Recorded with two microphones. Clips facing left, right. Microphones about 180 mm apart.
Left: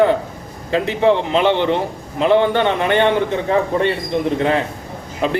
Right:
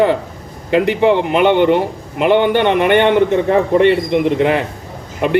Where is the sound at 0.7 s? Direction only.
65° right (ahead or behind).